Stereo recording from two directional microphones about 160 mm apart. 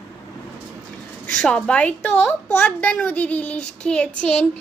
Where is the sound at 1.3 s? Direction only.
5° left (ahead or behind).